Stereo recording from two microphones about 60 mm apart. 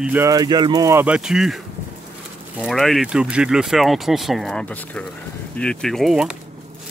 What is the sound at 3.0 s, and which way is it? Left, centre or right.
Speech, centre.